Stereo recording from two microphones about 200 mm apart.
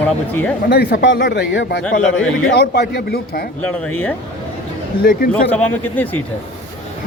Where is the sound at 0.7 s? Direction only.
55° left (ahead or behind).